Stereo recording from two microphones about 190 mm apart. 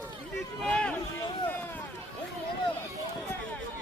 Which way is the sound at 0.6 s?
5° left (ahead or behind).